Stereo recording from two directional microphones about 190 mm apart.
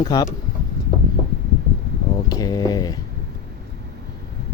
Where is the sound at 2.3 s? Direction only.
20° left (ahead or behind).